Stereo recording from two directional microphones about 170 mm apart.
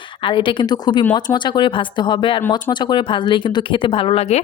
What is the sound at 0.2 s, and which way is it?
A woman's voice, 30° left (ahead or behind).